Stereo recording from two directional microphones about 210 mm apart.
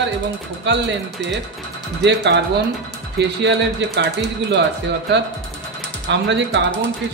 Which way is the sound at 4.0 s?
55° right (ahead or behind).